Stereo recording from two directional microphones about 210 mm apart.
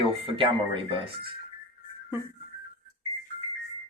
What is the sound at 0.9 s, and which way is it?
Speech, 25° right (ahead or behind).